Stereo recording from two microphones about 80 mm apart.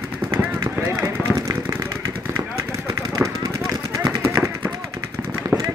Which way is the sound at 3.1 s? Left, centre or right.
Right.